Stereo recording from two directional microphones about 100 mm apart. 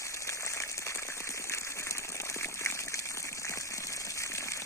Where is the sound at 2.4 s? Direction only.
25° left (ahead or behind).